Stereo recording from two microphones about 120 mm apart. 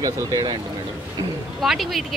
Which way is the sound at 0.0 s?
35° right (ahead or behind).